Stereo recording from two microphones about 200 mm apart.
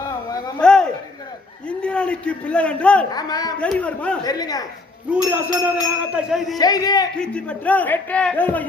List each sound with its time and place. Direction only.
0.6 s a sound: 5° left (ahead or behind)
1.6 s a man's voice: 5° left (ahead or behind)
3.1 s a man's voice: 20° left (ahead or behind)
3.6 s speech: 5° left (ahead or behind)
4.2 s a man's voice: 20° left (ahead or behind)
5.1 s speech: 10° right (ahead or behind)
6.6 s a man's voice: 20° left (ahead or behind)
7.2 s speech: 5° left (ahead or behind)